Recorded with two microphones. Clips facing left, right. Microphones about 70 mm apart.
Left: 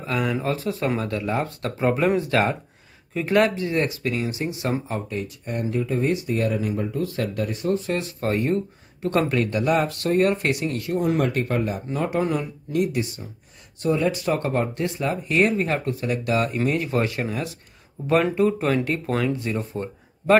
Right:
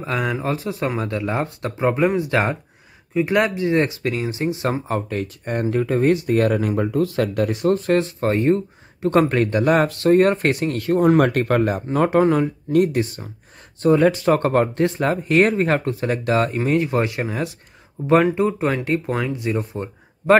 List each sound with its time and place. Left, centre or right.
0.0 s speech: right
1.8 s speech: centre
3.2 s speech: centre
3.6 s speech: right
4.6 s speech: right
7.7 s speech: right
11.1 s speech: right; by 19.9 s centre